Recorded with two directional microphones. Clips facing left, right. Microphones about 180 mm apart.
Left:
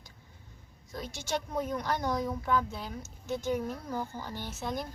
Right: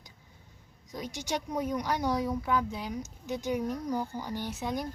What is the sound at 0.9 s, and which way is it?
Speech, 15° right (ahead or behind).